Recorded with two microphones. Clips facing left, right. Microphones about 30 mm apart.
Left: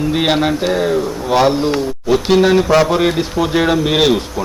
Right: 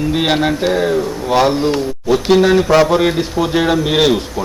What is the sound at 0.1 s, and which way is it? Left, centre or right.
A man's voice, centre.